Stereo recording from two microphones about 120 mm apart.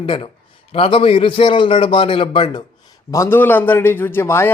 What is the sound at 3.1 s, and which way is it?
A man's voice, 20° left (ahead or behind).